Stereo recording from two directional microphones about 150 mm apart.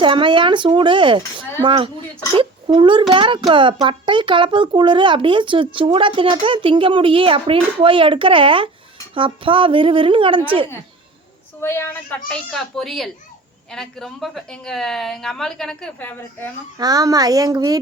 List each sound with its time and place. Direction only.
0.0 s a child's voice: 35° right (ahead or behind)
11.6 s a woman's voice: 15° left (ahead or behind)
12.3 s a woman's voice: centre (ahead or behind)
16.7 s speech: 25° right (ahead or behind)